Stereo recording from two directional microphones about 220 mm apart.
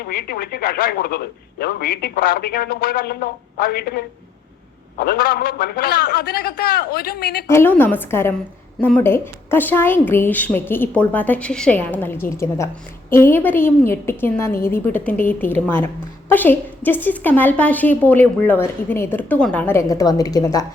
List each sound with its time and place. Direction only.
0.0 s speech: 45° left (ahead or behind)
7.4 s a woman's voice: 10° left (ahead or behind)